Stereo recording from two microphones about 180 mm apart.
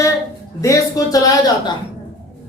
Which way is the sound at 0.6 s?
20° left (ahead or behind).